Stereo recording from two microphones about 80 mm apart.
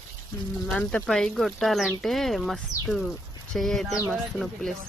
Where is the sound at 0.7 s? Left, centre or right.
Centre.